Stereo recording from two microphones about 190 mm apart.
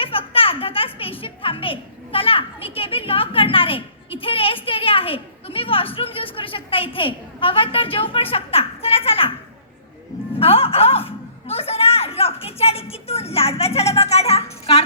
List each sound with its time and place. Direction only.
0.0 s a woman's voice: 30° left (ahead or behind)
10.3 s a woman's voice: 30° left (ahead or behind)